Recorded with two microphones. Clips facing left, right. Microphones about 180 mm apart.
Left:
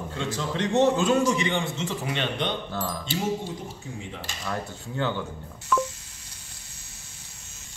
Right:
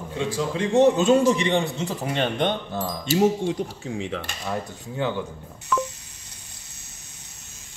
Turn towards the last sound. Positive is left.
turn(degrees=0)  # may be behind; listen again after turning